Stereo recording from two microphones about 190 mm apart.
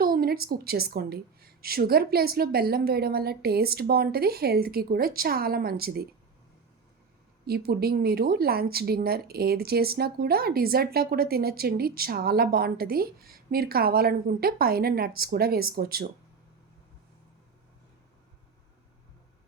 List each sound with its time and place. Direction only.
0.0 s speech: 50° right (ahead or behind)
7.4 s speech: 55° right (ahead or behind)